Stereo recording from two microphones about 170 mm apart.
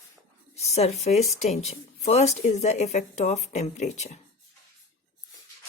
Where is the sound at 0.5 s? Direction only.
40° left (ahead or behind).